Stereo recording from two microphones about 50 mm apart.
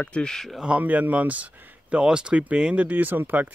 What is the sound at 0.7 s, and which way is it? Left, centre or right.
Speech, right.